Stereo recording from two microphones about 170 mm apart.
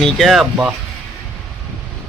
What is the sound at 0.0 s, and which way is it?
Speech, centre (ahead or behind).